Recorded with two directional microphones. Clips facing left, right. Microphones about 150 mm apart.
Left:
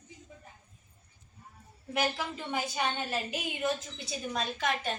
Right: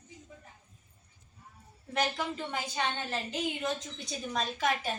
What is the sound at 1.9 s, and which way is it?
A woman's voice, 5° left (ahead or behind).